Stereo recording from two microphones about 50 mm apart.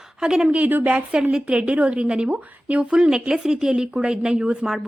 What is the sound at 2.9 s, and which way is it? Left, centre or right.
A woman's voice, centre.